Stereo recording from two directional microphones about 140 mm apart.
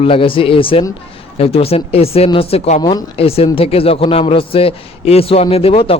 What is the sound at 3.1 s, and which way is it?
Speech, 45° left (ahead or behind).